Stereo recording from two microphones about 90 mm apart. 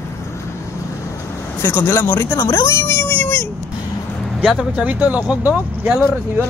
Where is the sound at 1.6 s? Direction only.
25° left (ahead or behind).